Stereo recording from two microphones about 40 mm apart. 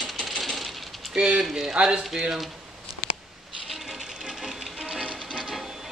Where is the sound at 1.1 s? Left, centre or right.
Right.